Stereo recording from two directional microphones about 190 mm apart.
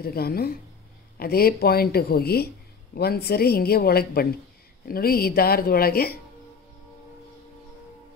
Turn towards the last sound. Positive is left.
turn(degrees=55)  # may be behind; listen again after turning